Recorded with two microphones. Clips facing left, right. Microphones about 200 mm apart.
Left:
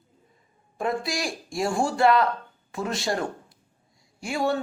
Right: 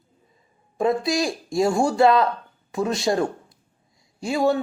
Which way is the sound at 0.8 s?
20° right (ahead or behind).